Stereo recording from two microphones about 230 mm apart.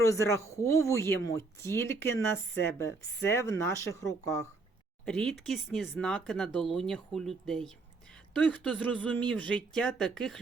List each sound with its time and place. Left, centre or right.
0.1 s speech: centre
5.0 s speech: centre